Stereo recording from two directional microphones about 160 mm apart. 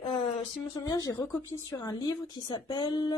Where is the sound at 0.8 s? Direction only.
25° left (ahead or behind).